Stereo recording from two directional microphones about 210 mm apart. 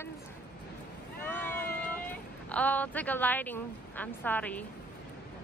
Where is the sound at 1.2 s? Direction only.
10° left (ahead or behind).